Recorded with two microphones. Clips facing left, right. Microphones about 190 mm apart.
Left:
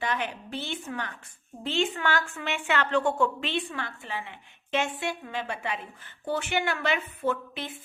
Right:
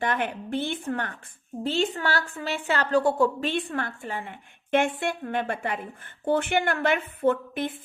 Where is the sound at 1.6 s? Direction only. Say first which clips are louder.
Right 2 dB; 40° right (ahead or behind).